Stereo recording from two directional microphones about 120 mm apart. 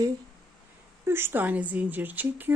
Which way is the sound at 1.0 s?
20° right (ahead or behind).